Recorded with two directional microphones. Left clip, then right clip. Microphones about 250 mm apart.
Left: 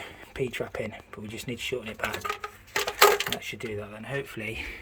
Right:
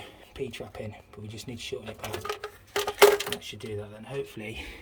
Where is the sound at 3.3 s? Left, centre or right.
Centre.